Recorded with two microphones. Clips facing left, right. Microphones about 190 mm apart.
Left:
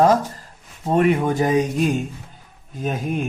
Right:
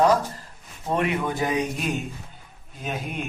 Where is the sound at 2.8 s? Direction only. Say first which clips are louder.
Left 7 dB; 40° left (ahead or behind).